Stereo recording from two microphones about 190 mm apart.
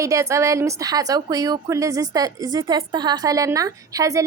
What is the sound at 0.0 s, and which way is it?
A woman's voice, 15° right (ahead or behind).